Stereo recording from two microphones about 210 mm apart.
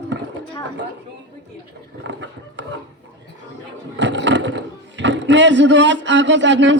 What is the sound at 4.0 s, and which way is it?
Speech, 60° right (ahead or behind).